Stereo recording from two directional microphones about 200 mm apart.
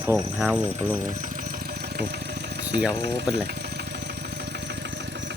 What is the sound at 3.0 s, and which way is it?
Speech, 55° right (ahead or behind).